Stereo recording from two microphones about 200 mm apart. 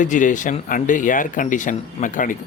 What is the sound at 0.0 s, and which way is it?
Speech, 40° left (ahead or behind).